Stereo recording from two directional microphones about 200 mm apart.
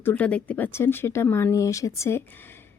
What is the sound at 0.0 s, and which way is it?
A woman's voice, 10° left (ahead or behind).